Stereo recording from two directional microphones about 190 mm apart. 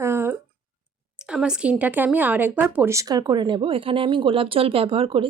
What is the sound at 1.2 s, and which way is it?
Speech, 5° right (ahead or behind).